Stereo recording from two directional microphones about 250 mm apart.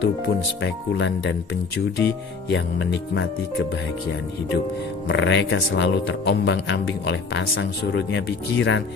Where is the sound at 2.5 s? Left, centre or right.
Left.